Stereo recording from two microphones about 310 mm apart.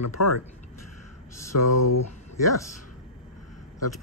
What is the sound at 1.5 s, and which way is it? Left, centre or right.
Speech, left.